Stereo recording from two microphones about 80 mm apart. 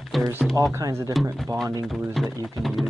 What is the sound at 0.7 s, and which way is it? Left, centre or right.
Speech, right.